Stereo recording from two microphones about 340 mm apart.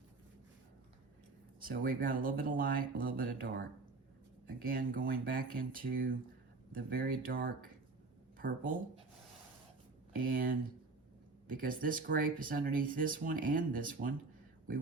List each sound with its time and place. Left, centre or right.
1.6 s speech: right
4.6 s speech: right
10.3 s speech: right